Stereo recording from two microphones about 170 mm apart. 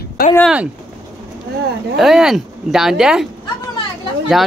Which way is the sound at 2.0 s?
5° right (ahead or behind).